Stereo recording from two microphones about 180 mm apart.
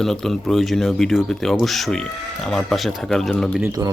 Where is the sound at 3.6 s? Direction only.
20° right (ahead or behind).